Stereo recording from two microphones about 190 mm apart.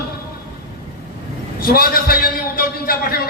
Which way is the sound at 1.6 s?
50° left (ahead or behind).